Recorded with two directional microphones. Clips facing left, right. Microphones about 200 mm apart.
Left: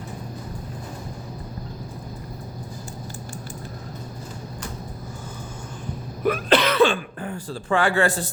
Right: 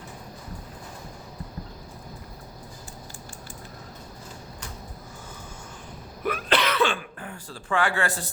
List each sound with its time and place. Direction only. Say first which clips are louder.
6.2 s throat clearing: left 6 dB; 40° left (ahead or behind)